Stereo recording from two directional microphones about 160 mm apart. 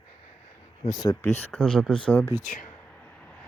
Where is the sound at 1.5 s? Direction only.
5° left (ahead or behind).